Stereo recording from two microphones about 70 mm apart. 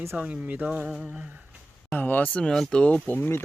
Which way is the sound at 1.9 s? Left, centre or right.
Left.